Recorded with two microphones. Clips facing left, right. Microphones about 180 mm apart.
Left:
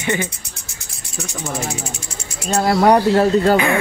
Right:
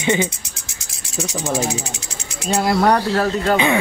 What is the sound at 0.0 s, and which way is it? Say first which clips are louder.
Speech: right 3 dB; 20° right (ahead or behind).